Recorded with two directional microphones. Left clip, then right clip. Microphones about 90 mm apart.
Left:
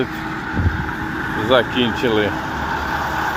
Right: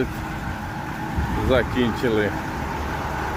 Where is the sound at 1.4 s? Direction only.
20° right (ahead or behind).